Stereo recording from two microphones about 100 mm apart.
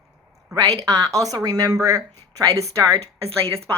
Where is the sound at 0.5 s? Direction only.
35° right (ahead or behind).